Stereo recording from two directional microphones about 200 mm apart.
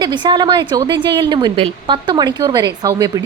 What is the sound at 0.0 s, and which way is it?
A woman's voice, 20° right (ahead or behind).